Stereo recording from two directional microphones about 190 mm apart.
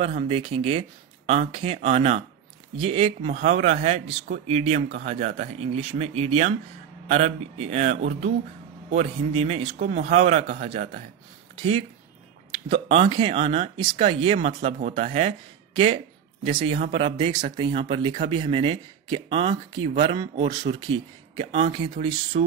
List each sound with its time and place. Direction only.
0.0 s speech: 30° right (ahead or behind)
12.6 s speech: 30° right (ahead or behind)